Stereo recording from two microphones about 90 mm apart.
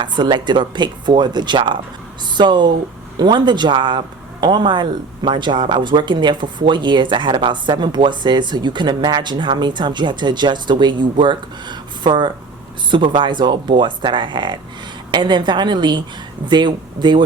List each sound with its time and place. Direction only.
0.0 s speech: 60° right (ahead or behind)